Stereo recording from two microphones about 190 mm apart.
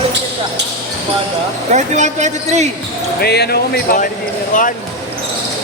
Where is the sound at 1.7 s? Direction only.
40° right (ahead or behind).